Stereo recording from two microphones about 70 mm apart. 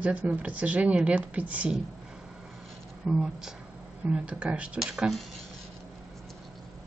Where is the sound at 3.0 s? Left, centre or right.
Centre.